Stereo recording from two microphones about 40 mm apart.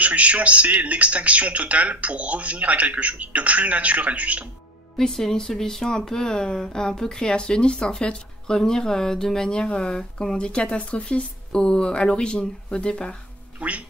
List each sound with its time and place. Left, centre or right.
0.0 s speech: right
4.9 s speech: centre
13.6 s music: right